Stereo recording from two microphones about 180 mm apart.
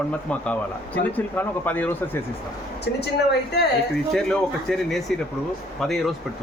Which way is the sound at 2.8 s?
65° left (ahead or behind).